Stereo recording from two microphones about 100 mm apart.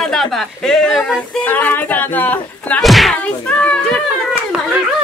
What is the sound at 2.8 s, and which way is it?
Speech, centre (ahead or behind).